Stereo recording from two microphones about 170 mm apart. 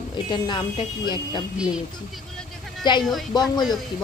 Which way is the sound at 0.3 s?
30° left (ahead or behind).